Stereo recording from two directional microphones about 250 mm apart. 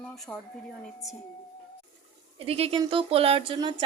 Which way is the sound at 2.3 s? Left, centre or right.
Right.